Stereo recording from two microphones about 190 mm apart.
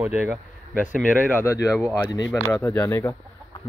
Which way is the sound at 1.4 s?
15° left (ahead or behind).